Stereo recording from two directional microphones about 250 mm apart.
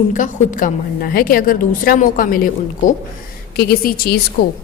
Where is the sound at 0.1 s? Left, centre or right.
Left.